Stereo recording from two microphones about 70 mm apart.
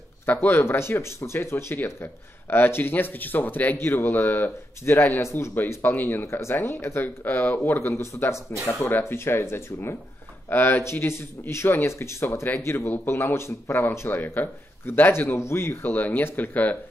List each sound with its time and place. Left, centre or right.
0.3 s speech: left
14.0 s speech: left